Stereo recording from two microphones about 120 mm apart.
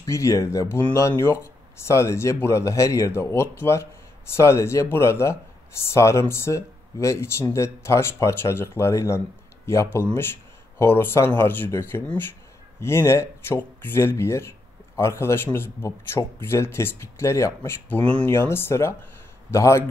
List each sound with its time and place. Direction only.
0.0 s speech: 25° left (ahead or behind)